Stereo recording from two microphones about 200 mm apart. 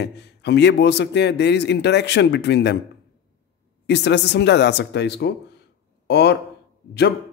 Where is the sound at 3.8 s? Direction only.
60° left (ahead or behind).